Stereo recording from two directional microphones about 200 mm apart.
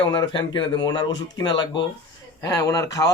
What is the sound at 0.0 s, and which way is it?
A man's voice, 25° left (ahead or behind).